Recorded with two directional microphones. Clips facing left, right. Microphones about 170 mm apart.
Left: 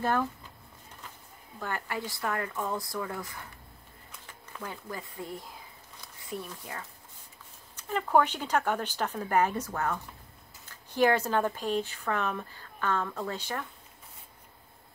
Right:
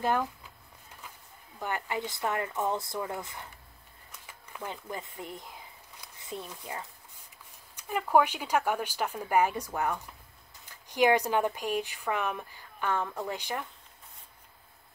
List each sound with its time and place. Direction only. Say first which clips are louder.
0.0 s speech: even; 15° right (ahead or behind)
1.6 s speech: right 1 dB; 20° right (ahead or behind)
7.7 s speech: even; 10° right (ahead or behind)